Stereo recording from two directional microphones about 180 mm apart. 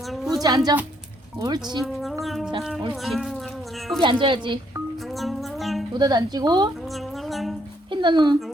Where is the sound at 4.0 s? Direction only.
25° right (ahead or behind).